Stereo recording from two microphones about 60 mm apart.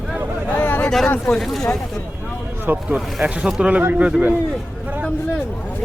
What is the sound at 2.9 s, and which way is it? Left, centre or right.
Speech, centre.